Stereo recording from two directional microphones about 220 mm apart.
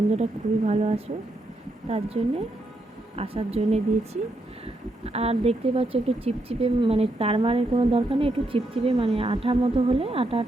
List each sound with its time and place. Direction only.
0.1 s speech: 30° right (ahead or behind)